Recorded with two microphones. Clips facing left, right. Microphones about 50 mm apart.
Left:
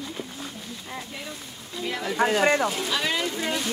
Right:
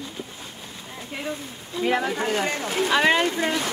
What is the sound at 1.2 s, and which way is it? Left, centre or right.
Speech, right.